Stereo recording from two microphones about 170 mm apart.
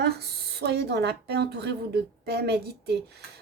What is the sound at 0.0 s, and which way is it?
Speech, 75° right (ahead or behind).